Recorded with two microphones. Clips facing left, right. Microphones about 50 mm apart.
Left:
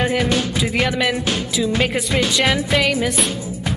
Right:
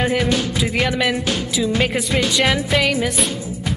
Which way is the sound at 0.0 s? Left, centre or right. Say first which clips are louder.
Even; centre.